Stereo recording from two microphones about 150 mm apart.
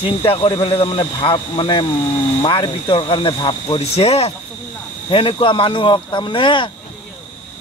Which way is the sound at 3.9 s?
45° left (ahead or behind).